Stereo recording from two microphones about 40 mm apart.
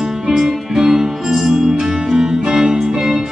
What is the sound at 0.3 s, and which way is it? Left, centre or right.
Music, centre.